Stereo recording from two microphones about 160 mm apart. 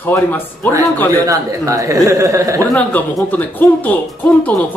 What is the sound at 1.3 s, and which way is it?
A man's voice, 20° right (ahead or behind).